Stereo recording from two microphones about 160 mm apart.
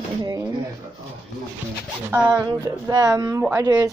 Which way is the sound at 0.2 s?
25° right (ahead or behind).